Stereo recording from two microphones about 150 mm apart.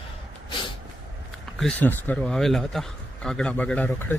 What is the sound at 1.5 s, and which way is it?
A man's voice, 5° left (ahead or behind).